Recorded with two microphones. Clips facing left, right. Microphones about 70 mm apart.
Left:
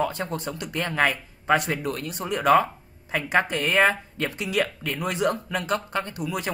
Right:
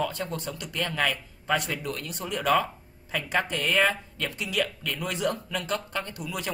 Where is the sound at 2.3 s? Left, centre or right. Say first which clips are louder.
Left 5 dB; left.